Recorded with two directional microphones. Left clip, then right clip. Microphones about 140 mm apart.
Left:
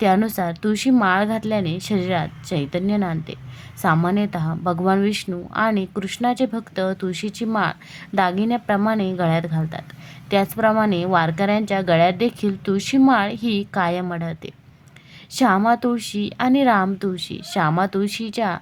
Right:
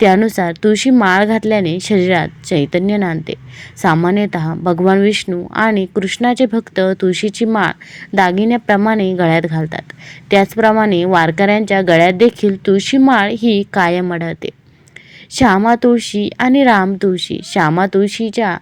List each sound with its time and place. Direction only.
0.0 s speech: 25° right (ahead or behind)